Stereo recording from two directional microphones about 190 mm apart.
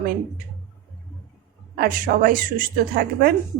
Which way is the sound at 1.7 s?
50° right (ahead or behind).